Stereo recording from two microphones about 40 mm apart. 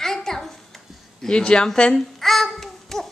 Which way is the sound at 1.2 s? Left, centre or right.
Left.